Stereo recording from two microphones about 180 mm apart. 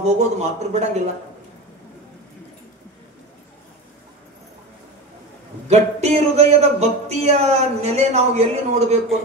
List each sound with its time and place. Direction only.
0.0 s speech: 40° right (ahead or behind)
5.7 s speech: 35° right (ahead or behind)